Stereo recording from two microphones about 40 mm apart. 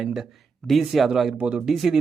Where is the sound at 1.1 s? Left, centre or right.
Centre.